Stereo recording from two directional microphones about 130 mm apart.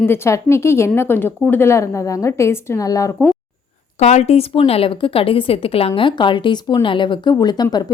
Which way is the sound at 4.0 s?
60° left (ahead or behind).